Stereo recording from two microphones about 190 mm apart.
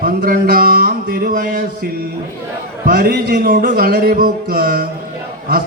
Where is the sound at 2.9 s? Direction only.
55° right (ahead or behind).